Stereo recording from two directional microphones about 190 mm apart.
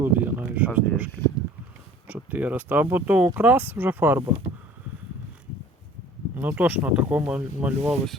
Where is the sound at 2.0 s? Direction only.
10° right (ahead or behind).